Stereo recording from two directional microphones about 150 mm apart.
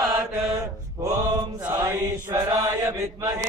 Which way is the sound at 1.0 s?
25° right (ahead or behind).